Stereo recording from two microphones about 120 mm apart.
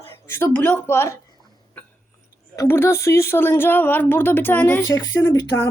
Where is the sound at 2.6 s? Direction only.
20° left (ahead or behind).